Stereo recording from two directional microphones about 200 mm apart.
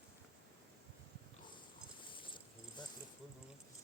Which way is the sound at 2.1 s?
25° left (ahead or behind).